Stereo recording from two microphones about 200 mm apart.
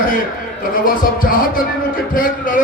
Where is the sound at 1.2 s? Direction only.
45° left (ahead or behind).